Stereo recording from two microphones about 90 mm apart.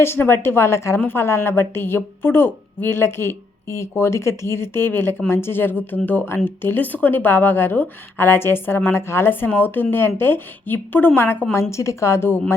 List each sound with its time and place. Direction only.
0.0 s a woman's voice: 25° left (ahead or behind)